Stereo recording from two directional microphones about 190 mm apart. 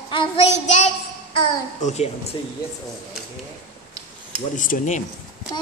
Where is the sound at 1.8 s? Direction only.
35° left (ahead or behind).